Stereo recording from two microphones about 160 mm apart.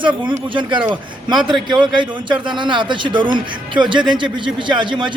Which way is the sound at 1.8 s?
30° right (ahead or behind).